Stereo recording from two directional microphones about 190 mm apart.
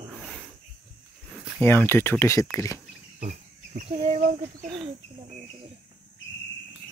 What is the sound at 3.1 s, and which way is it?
Speech, 45° right (ahead or behind).